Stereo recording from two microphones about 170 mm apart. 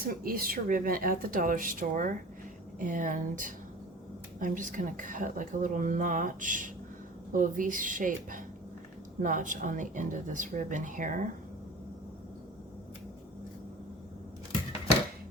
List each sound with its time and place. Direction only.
0.1 s speech: 60° right (ahead or behind)